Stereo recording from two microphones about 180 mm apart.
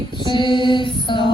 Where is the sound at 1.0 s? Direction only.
25° left (ahead or behind).